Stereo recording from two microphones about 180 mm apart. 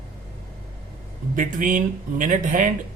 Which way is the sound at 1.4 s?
45° right (ahead or behind).